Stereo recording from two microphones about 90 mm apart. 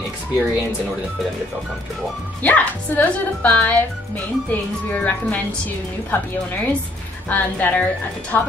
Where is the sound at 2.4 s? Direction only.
20° left (ahead or behind).